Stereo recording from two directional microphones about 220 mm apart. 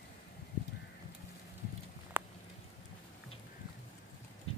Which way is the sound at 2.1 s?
10° right (ahead or behind).